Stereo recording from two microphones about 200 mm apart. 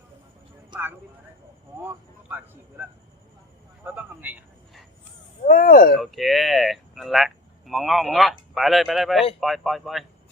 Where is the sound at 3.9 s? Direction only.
10° right (ahead or behind).